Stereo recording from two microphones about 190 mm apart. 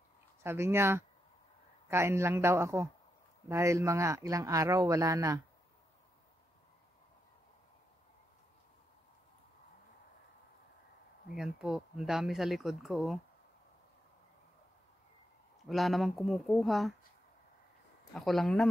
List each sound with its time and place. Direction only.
0.4 s speech: 15° right (ahead or behind)
11.3 s speech: 5° right (ahead or behind)
15.6 s speech: centre (ahead or behind)
18.1 s speech: centre (ahead or behind)